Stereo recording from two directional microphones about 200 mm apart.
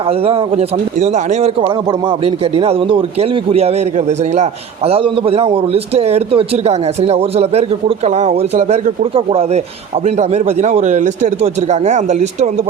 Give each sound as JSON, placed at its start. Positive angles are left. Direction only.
{"t": 0.1, "sound": "a man's voice", "side_deg": -30}